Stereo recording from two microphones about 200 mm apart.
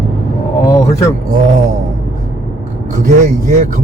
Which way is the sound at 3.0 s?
35° right (ahead or behind).